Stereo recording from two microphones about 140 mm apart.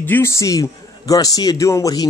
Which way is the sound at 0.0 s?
15° left (ahead or behind).